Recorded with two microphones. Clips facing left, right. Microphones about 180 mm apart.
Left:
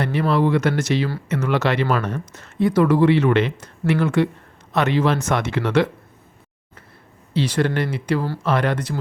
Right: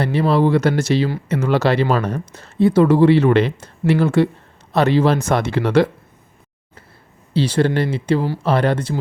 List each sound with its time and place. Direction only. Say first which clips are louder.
0.0 s speech: right 3 dB; 30° right (ahead or behind)
7.3 s speech: right 3 dB; 30° right (ahead or behind)